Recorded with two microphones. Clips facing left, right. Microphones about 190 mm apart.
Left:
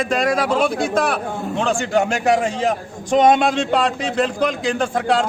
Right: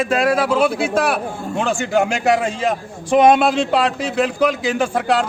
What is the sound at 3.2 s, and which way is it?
A man's voice, 5° right (ahead or behind).